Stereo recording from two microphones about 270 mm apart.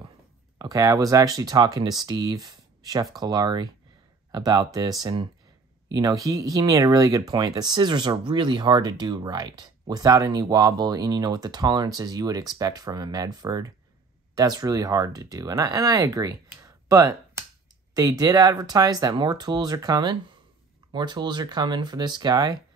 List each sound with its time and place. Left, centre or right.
0.6 s speech: centre